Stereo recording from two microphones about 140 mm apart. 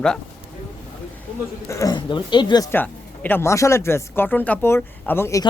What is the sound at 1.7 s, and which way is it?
Speech, 25° left (ahead or behind).